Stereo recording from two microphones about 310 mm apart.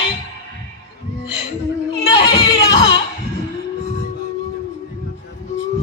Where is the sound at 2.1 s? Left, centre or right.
Centre.